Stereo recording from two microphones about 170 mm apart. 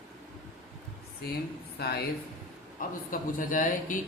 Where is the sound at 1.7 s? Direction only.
70° left (ahead or behind).